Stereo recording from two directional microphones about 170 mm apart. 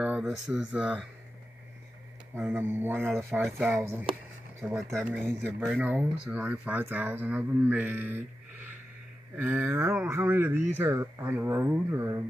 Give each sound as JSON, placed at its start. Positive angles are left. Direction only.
{"t": 0.0, "sound": "speech", "side_deg": -5}
{"t": 2.3, "sound": "speech", "side_deg": -15}
{"t": 5.0, "sound": "speech", "side_deg": 0}